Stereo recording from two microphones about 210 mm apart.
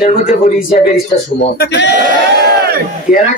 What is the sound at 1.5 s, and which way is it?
Speech, 55° left (ahead or behind).